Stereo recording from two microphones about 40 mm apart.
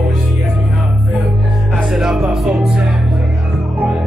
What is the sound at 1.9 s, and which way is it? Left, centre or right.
Music, centre.